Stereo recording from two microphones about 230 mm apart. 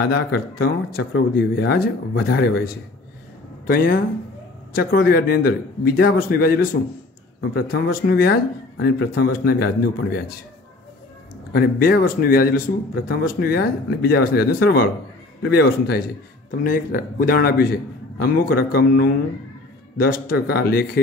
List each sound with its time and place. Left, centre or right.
0.0 s a man's voice: left
11.5 s a man's voice: left